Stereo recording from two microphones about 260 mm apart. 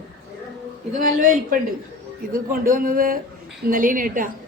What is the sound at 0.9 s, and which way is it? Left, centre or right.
A man's voice, right.